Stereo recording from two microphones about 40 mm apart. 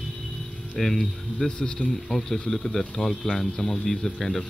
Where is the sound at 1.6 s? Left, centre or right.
Left.